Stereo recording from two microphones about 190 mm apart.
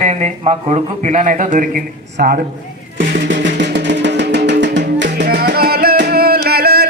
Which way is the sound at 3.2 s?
70° right (ahead or behind).